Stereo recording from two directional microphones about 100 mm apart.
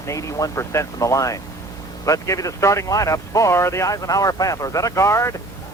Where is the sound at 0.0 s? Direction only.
30° left (ahead or behind).